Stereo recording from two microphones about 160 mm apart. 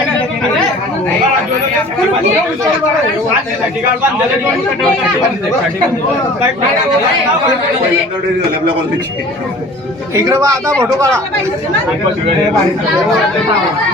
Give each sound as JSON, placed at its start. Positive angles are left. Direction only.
{"t": 10.2, "sound": "a man's voice", "side_deg": -20}